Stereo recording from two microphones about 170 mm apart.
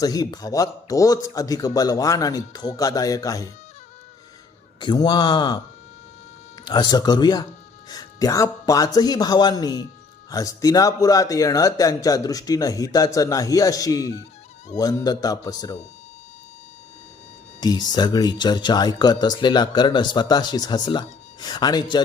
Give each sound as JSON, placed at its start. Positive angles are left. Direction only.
{"t": 0.0, "sound": "speech", "side_deg": 20}
{"t": 4.8, "sound": "speech", "side_deg": 25}
{"t": 6.7, "sound": "speech", "side_deg": 25}
{"t": 17.6, "sound": "speech", "side_deg": 25}